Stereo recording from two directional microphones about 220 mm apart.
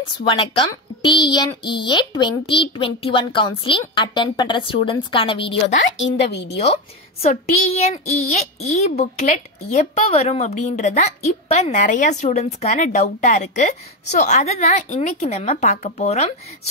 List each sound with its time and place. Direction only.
0.3 s speech: 20° left (ahead or behind)
5.9 s a woman's voice: 55° left (ahead or behind)
6.6 s a woman's voice: 30° left (ahead or behind)